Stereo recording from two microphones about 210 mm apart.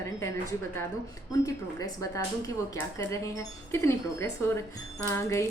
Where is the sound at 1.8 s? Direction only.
15° left (ahead or behind).